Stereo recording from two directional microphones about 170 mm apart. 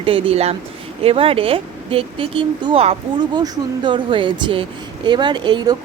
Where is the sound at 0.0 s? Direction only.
35° right (ahead or behind).